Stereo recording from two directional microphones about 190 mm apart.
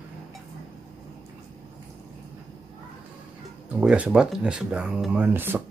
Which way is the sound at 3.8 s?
5° right (ahead or behind).